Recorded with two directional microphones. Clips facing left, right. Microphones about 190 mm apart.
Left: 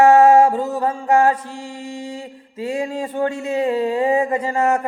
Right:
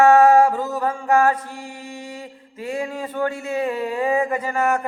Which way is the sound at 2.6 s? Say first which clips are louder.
Left 3 dB; 30° left (ahead or behind).